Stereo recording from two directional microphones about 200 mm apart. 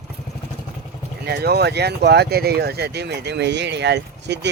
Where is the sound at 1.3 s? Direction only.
55° right (ahead or behind).